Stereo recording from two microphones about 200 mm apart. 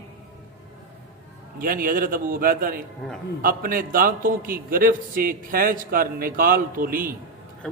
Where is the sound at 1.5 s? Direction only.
45° right (ahead or behind).